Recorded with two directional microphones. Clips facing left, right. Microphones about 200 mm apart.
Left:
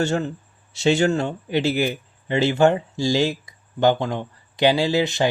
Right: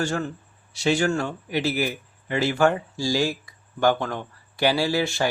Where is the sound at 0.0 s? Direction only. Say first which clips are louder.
Left 4 dB; 25° left (ahead or behind).